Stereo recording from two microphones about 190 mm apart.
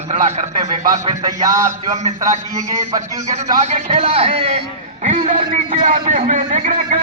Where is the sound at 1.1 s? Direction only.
20° right (ahead or behind).